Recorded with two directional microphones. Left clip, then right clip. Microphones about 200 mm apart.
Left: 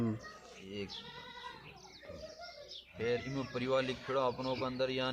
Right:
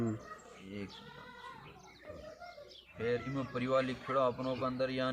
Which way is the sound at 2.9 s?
35° left (ahead or behind).